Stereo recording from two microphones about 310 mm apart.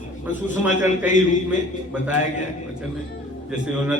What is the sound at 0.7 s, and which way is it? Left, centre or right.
Speech, left.